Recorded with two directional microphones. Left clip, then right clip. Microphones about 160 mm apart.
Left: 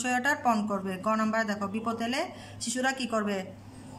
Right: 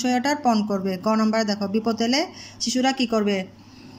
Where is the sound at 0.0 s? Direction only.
20° right (ahead or behind).